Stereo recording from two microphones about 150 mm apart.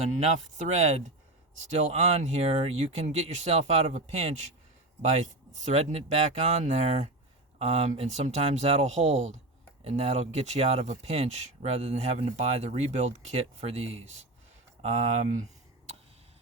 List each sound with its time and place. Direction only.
0.7 s speech: 50° right (ahead or behind)